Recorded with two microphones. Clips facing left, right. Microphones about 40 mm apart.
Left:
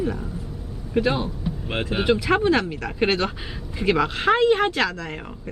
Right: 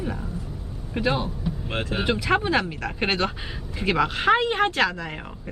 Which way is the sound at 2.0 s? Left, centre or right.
Centre.